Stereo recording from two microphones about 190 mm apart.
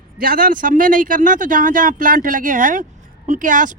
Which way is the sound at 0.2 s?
45° right (ahead or behind).